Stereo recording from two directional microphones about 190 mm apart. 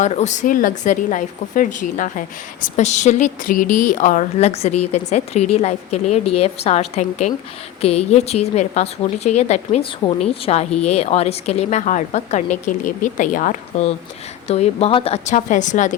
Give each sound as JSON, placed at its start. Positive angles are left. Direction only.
{"t": 0.0, "sound": "a woman's voice", "side_deg": 40}